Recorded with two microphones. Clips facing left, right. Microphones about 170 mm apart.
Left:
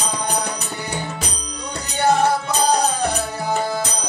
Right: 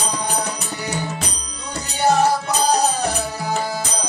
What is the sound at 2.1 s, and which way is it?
Music, 55° left (ahead or behind).